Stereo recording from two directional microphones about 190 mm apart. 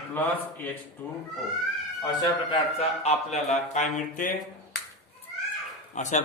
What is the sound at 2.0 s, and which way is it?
Speech, 25° left (ahead or behind).